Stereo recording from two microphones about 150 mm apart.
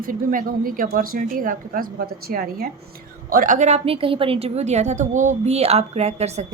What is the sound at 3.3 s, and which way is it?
A woman's voice, 65° right (ahead or behind).